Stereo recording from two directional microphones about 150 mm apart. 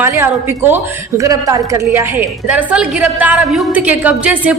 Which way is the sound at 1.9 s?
10° right (ahead or behind).